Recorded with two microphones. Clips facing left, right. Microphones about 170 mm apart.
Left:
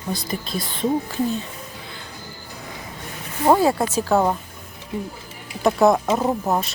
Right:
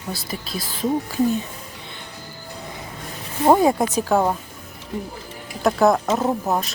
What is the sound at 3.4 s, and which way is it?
Speech, 15° right (ahead or behind).